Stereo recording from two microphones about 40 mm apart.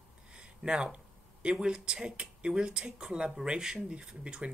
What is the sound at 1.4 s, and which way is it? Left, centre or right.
Speech, right.